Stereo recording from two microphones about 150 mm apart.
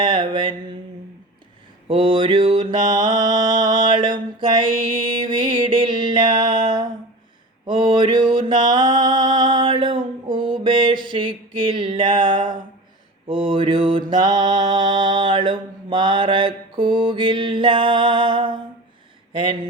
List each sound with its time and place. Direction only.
0.0 s mantra: 30° right (ahead or behind)
1.9 s mantra: 35° right (ahead or behind)
7.8 s music: 30° right (ahead or behind)
13.2 s mantra: 35° right (ahead or behind)